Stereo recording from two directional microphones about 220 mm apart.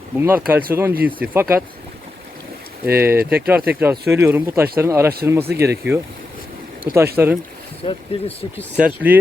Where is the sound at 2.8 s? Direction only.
10° right (ahead or behind).